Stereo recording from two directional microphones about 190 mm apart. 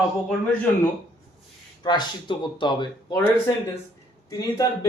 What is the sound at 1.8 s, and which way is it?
Speech, 20° left (ahead or behind).